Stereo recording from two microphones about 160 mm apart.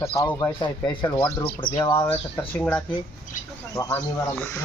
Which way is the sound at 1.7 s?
15° left (ahead or behind).